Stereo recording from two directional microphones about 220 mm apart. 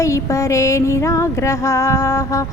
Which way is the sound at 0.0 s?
15° left (ahead or behind).